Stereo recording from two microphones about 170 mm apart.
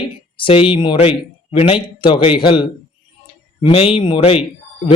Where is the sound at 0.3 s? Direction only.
30° left (ahead or behind).